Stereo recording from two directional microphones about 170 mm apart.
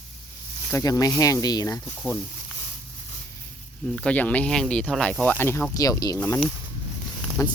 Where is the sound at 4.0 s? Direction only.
10° left (ahead or behind).